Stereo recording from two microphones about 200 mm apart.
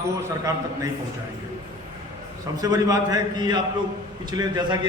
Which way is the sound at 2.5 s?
20° right (ahead or behind).